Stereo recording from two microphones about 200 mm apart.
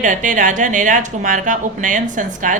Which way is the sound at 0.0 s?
40° right (ahead or behind).